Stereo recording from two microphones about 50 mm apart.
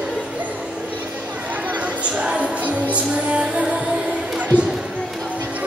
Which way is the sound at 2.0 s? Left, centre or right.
Right.